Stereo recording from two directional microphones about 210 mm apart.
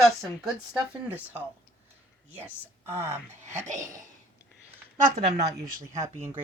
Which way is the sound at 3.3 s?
35° right (ahead or behind).